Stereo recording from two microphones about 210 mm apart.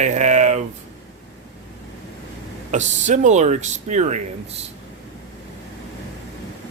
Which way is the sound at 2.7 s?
35° right (ahead or behind).